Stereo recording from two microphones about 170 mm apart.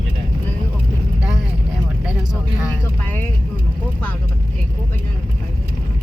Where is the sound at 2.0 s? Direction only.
5° right (ahead or behind).